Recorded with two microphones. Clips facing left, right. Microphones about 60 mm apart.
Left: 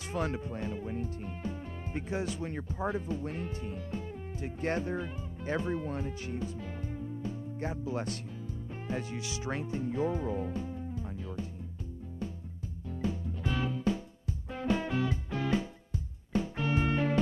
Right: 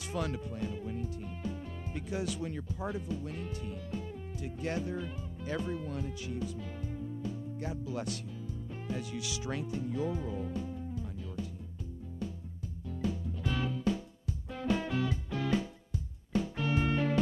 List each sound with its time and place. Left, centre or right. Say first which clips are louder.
0.0 s speech: left 2 dB; left
12.9 s music: left 1 dB; left